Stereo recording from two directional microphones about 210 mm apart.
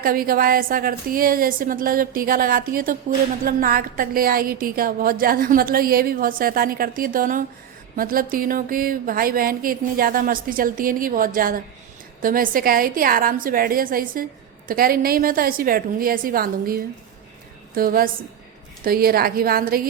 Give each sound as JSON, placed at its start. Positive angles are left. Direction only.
{"t": 0.0, "sound": "a woman's voice", "side_deg": -45}